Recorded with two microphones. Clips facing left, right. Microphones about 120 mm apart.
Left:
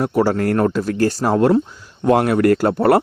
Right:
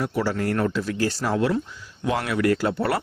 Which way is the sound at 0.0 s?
45° left (ahead or behind).